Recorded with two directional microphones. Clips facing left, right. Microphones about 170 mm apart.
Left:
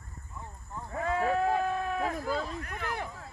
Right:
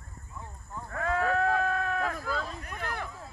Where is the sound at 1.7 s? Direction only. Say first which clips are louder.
Right 1 dB; 5° left (ahead or behind).